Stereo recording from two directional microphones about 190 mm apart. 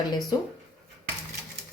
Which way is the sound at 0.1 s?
20° left (ahead or behind).